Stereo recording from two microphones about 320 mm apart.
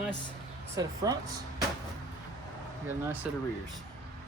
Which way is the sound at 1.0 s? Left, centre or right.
Centre.